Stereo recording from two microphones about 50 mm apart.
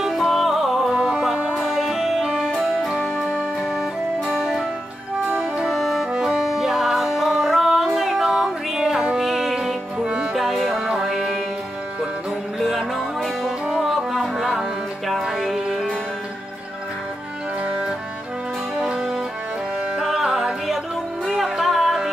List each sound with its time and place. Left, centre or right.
0.0 s music: centre
1.1 s music: centre
1.5 s music: centre
2.2 s music: centre
2.5 s music: centre
4.4 s music: centre
5.7 s music: centre
10.0 s music: right
10.3 s music: centre
10.6 s music: centre
12.5 s music: centre
18.8 s music: centre